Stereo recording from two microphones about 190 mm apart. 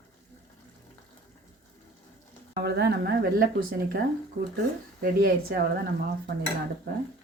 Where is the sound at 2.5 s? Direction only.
60° right (ahead or behind).